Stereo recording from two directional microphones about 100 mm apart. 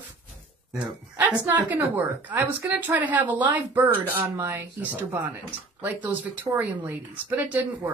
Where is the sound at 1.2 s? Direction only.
15° right (ahead or behind).